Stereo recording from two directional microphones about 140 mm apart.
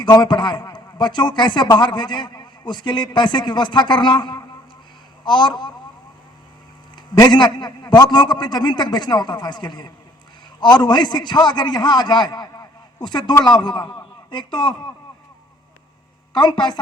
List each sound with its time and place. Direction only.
0.0 s a man's voice: 30° left (ahead or behind)
7.2 s a man's voice: 30° left (ahead or behind)
16.4 s a man's voice: 30° left (ahead or behind)